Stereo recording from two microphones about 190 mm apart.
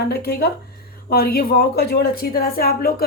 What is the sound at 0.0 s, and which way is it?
A woman's voice, 55° left (ahead or behind).